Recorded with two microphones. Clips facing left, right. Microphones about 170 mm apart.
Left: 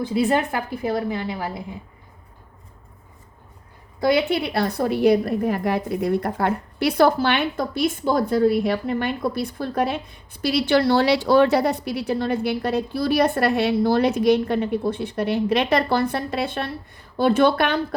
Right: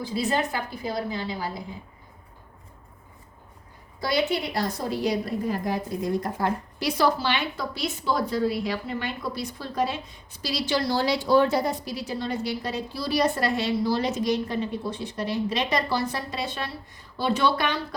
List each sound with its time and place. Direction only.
0.0 s a woman's voice: 55° left (ahead or behind)
4.0 s a woman's voice: 60° left (ahead or behind)